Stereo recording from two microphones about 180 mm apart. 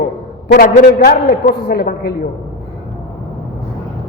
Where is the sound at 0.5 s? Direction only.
55° left (ahead or behind).